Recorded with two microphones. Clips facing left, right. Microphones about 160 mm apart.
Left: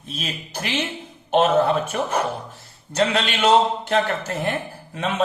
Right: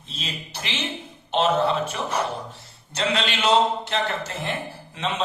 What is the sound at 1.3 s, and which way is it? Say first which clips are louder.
A man's voice: left 4 dB; 55° left (ahead or behind).